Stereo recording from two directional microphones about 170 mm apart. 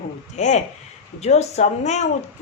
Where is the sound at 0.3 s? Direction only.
45° left (ahead or behind).